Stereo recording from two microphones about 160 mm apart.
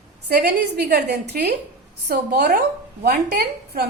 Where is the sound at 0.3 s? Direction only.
90° right.